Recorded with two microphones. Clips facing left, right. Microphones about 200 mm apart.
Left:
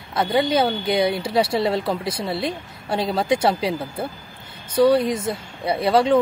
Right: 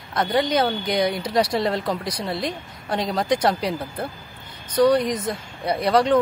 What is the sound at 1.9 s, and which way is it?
Speech, 25° left (ahead or behind).